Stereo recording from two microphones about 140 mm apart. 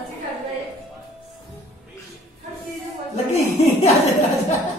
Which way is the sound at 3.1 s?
50° left (ahead or behind).